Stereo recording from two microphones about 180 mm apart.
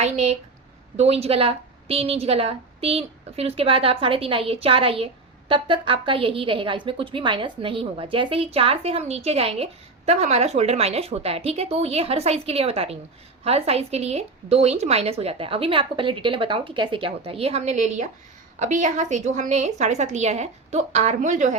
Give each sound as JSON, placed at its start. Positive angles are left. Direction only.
{"t": 0.0, "sound": "a woman's voice", "side_deg": -40}